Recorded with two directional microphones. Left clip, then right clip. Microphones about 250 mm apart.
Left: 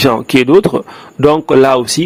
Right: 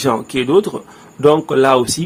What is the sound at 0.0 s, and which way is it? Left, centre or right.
Speech, left.